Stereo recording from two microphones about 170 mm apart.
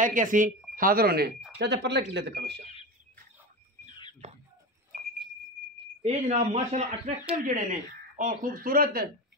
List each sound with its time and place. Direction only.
0.0 s speech: 50° right (ahead or behind)
1.6 s speech: 85° right
4.2 s a sound: 40° right (ahead or behind)
6.0 s speech: 40° right (ahead or behind); by 9.1 s 60° right (ahead or behind)